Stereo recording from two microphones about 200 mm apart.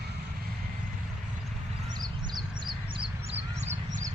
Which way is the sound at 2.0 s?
20° right (ahead or behind).